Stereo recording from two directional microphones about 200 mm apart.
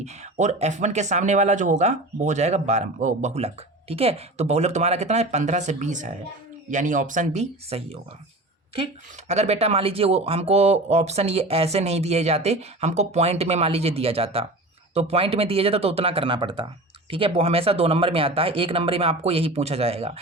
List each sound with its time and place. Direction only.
0.0 s speech: 35° right (ahead or behind)
9.2 s speech: 35° right (ahead or behind)